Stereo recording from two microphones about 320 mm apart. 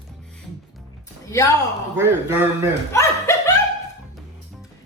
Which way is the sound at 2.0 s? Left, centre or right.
Centre.